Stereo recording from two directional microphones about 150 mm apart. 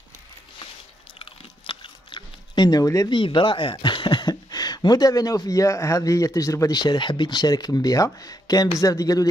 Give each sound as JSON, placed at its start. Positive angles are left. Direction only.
{"t": 1.2, "sound": "speech", "side_deg": 35}